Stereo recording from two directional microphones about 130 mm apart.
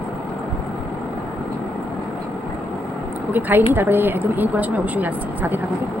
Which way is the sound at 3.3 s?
15° right (ahead or behind).